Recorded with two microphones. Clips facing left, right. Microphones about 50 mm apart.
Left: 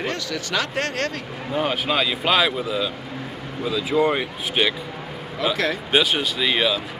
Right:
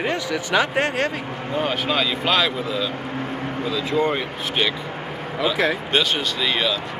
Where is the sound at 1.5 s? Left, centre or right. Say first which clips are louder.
Even; centre.